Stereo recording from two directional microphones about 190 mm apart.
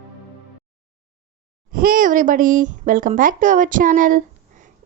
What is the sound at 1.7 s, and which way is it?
Speech, 45° right (ahead or behind).